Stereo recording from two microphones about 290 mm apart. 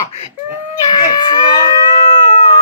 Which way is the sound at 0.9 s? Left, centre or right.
Centre.